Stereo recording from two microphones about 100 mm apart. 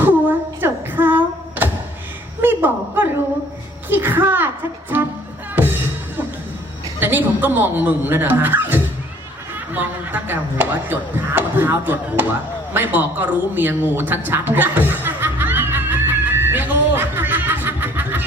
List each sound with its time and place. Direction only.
0.0 s singing: 20° right (ahead or behind)
2.4 s a sound: 20° right (ahead or behind)
3.8 s music: 20° right (ahead or behind)
7.0 s speech: 20° right (ahead or behind)
9.7 s a sound: 20° right (ahead or behind)
12.7 s a man's voice: 20° right (ahead or behind)
14.3 s music: 20° right (ahead or behind)